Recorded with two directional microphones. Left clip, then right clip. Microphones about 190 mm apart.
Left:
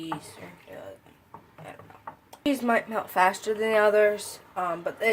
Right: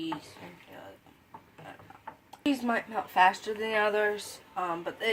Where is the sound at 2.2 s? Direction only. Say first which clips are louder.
Left 4 dB; 35° left (ahead or behind).